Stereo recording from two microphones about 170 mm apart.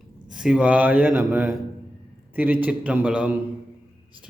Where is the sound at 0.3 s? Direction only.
5° right (ahead or behind).